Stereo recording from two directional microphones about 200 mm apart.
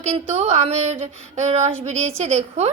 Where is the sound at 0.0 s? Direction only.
35° right (ahead or behind).